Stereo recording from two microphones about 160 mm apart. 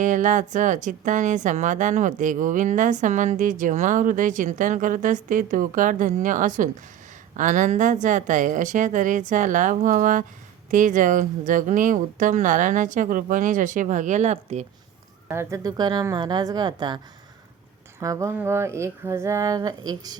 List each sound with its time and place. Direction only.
0.0 s a woman's voice: 50° right (ahead or behind)
15.3 s speech: 15° right (ahead or behind)
18.0 s speech: 20° right (ahead or behind)